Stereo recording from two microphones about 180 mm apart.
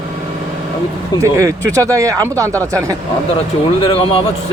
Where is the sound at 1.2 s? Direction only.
15° right (ahead or behind).